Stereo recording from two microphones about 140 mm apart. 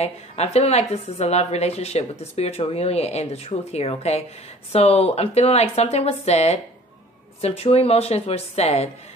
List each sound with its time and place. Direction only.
0.0 s a woman's voice: 50° left (ahead or behind)